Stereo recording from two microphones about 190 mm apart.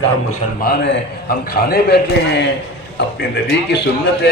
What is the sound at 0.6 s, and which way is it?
A man's voice, 50° left (ahead or behind).